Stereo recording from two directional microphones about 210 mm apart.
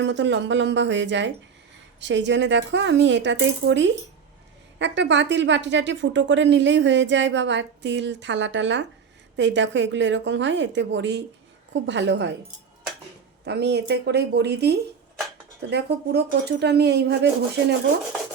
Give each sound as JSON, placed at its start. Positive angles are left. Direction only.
{"t": 0.0, "sound": "a woman's voice", "side_deg": -60}
{"t": 13.4, "sound": "speech", "side_deg": -50}